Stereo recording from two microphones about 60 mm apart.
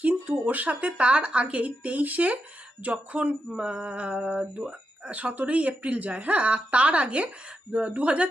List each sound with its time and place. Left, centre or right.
0.0 s speech: right